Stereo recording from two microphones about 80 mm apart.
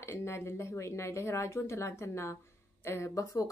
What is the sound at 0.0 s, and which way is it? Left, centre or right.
Speech, left.